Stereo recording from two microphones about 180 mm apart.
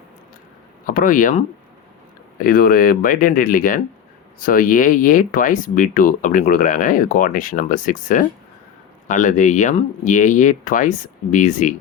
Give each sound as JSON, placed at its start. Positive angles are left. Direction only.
{"t": 0.9, "sound": "speech", "side_deg": 50}